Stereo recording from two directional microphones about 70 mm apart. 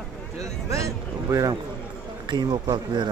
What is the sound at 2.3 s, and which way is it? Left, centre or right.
Speech, right.